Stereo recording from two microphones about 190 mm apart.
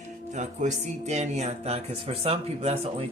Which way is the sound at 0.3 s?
35° right (ahead or behind).